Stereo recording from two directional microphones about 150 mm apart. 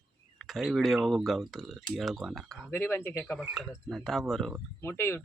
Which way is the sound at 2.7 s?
15° left (ahead or behind).